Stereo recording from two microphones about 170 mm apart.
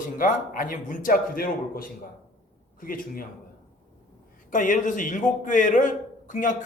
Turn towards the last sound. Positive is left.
turn(degrees=50)  # may be behind; listen again after turning